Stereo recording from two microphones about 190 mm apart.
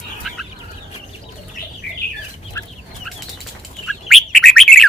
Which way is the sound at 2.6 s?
15° left (ahead or behind).